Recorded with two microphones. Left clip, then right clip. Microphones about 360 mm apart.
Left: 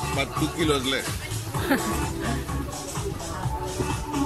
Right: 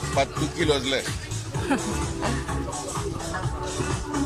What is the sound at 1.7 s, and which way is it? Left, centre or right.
Speech, centre.